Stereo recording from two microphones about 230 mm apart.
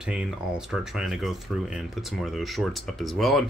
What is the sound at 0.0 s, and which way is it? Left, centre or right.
Speech, centre.